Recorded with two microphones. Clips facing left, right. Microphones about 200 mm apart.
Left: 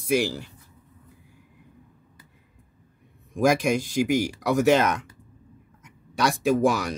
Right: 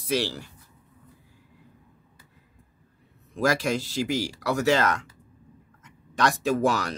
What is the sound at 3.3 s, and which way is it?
Speech, 15° left (ahead or behind).